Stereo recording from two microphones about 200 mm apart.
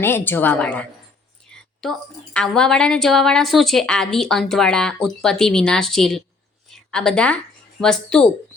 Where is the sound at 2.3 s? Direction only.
5° left (ahead or behind).